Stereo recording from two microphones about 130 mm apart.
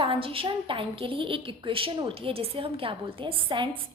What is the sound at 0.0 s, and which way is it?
A woman's voice, 45° right (ahead or behind).